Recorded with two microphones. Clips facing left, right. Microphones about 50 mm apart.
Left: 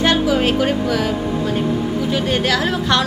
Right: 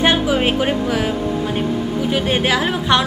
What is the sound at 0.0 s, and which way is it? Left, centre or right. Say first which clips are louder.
A woman's voice: even; centre.